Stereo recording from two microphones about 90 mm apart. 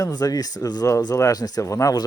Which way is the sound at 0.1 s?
45° left (ahead or behind).